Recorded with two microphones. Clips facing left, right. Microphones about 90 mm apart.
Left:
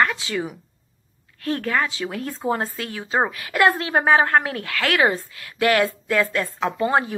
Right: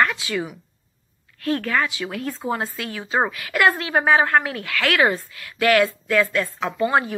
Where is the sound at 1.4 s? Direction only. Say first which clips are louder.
Right 1 dB; 25° left (ahead or behind).